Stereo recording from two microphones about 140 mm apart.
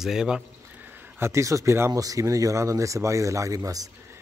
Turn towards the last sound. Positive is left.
turn(degrees=-25)  # may be behind; listen again after turning